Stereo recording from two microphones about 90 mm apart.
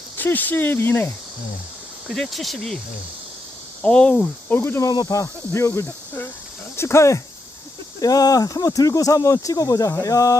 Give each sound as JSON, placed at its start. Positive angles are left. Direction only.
{"t": 0.2, "sound": "speech", "side_deg": 20}
{"t": 2.0, "sound": "speech", "side_deg": 0}
{"t": 3.8, "sound": "speech", "side_deg": 10}
{"t": 4.8, "sound": "speech", "side_deg": 45}
{"t": 8.0, "sound": "speech", "side_deg": 45}